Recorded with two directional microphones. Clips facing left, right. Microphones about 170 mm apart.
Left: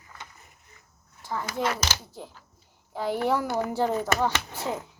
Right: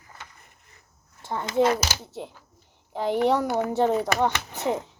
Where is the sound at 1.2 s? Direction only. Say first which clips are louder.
Right 7 dB; 25° right (ahead or behind).